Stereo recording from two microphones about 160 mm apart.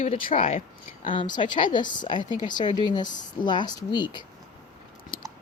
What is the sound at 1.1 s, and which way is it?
Speech, 30° left (ahead or behind).